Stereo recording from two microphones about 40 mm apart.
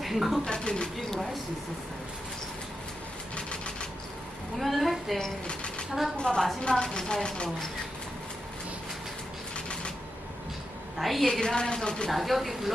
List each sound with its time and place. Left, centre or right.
0.0 s speech: centre
0.5 s speech: left
3.3 s a sound: left
4.5 s a woman's voice: centre
5.5 s a sound: left
6.3 s speech: left
10.9 s speech: centre
11.3 s speech: left
12.1 s speech: centre